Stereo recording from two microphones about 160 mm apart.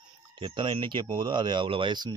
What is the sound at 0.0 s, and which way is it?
Speech, 30° right (ahead or behind).